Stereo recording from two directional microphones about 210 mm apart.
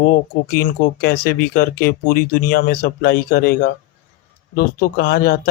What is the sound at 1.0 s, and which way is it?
Speech, 45° left (ahead or behind).